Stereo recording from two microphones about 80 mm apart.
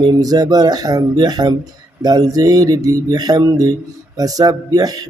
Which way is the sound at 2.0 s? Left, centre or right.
Right.